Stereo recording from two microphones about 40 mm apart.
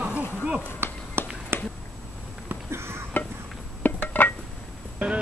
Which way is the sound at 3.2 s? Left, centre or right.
Left.